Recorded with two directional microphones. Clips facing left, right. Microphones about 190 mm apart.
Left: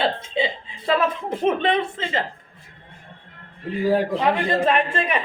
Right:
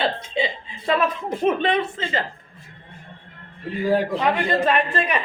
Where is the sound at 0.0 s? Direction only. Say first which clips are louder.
Left 1 dB; 25° left (ahead or behind).